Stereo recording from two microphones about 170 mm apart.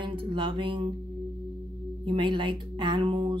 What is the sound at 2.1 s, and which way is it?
Music, 30° right (ahead or behind).